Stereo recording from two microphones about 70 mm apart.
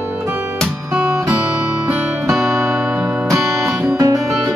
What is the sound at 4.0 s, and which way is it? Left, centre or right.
Music, right.